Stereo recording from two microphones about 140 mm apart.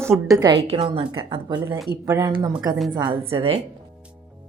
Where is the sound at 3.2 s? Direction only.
45° right (ahead or behind).